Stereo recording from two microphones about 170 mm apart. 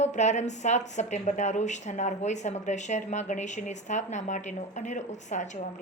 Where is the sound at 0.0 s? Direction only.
45° left (ahead or behind).